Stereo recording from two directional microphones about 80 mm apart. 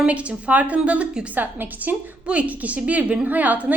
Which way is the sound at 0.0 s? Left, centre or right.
Centre.